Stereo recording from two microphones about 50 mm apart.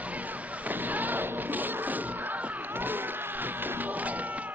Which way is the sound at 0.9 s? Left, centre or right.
Right.